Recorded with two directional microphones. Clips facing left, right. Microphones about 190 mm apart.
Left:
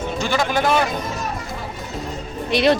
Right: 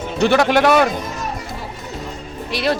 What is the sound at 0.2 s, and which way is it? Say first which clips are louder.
Speech: right 8 dB; 65° right (ahead or behind).